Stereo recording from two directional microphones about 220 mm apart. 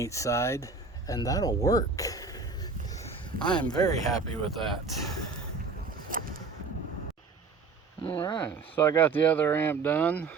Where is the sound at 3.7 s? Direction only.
15° left (ahead or behind).